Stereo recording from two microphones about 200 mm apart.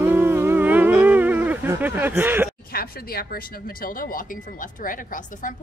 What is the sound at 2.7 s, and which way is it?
A woman's voice, 50° left (ahead or behind).